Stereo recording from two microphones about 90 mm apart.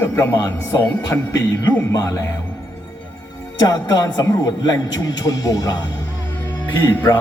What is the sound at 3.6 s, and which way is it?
A man's voice, 45° left (ahead or behind).